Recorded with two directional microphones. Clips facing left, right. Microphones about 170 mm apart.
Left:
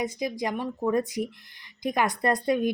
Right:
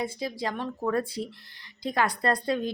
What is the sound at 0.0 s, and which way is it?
A woman's voice, 15° left (ahead or behind).